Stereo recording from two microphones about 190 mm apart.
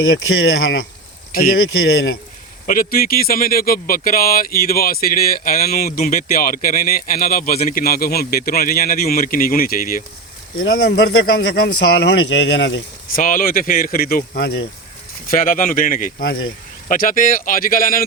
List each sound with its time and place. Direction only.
0.4 s speech: 75° left (ahead or behind); by 0.9 s 90° left
1.3 s speech: 50° left (ahead or behind)
2.6 s speech: 50° left (ahead or behind); by 12.8 s 70° left (ahead or behind)
13.1 s speech: 45° left (ahead or behind)